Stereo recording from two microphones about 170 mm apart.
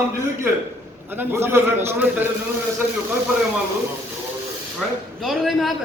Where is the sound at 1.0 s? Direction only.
10° right (ahead or behind).